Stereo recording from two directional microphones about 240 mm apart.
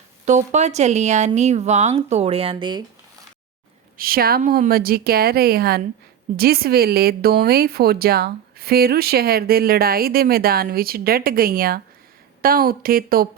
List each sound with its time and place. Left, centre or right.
0.3 s speech: right
3.9 s speech: right